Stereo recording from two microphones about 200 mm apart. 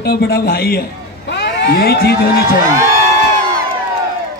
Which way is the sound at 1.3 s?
60° left (ahead or behind).